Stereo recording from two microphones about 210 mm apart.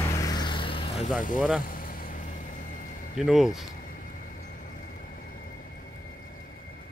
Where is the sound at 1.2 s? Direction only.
40° left (ahead or behind).